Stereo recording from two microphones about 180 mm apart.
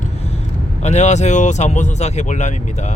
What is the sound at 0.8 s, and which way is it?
Speech, 40° left (ahead or behind).